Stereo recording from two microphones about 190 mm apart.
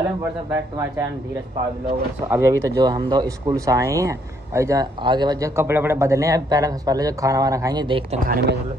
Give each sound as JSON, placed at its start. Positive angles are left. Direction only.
{"t": 0.2, "sound": "speech", "side_deg": -10}
{"t": 2.2, "sound": "speech", "side_deg": -15}
{"t": 8.3, "sound": "speech", "side_deg": -50}